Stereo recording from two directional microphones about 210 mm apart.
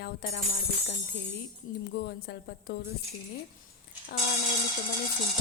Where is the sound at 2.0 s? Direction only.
50° left (ahead or behind).